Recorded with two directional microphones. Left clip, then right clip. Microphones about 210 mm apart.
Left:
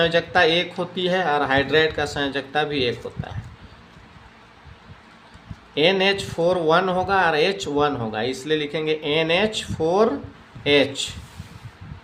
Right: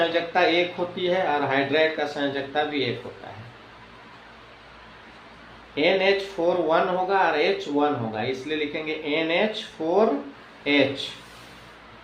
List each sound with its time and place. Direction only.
0.0 s speech: 40° left (ahead or behind)
5.7 s speech: 40° left (ahead or behind)